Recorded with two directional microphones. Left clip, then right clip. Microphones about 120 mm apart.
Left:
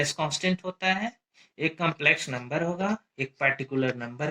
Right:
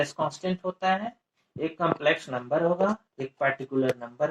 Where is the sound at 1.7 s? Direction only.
30° left (ahead or behind).